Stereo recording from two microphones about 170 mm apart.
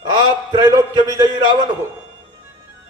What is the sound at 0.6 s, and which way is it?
Speech, 20° right (ahead or behind).